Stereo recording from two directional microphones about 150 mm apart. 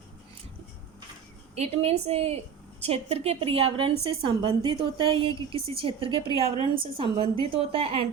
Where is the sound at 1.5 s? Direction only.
45° right (ahead or behind).